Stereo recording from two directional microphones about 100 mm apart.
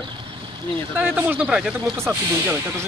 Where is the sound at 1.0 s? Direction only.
15° right (ahead or behind).